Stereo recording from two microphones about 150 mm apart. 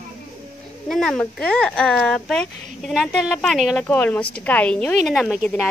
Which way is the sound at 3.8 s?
10° left (ahead or behind).